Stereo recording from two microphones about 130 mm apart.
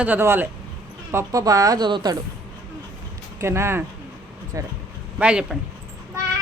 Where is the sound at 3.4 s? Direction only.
20° right (ahead or behind).